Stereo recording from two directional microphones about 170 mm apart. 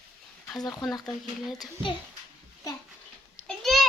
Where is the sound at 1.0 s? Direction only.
Centre (ahead or behind).